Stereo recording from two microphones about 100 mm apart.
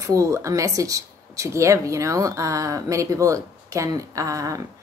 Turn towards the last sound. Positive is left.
turn(degrees=-35)  # may be behind; listen again after turning